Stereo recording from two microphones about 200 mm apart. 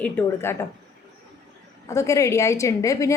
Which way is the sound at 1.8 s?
15° left (ahead or behind).